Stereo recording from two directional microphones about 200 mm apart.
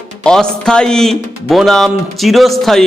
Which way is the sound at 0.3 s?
5° left (ahead or behind).